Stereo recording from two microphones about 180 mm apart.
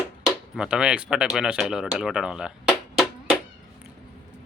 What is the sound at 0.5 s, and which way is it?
Speech, 5° right (ahead or behind).